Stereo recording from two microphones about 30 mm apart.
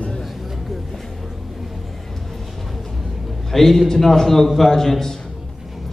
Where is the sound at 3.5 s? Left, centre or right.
Centre.